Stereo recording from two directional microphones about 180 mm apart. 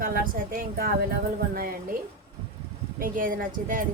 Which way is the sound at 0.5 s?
55° right (ahead or behind).